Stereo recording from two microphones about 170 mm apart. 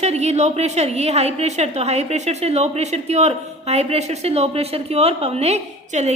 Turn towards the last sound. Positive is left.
turn(degrees=-40)  # may be behind; listen again after turning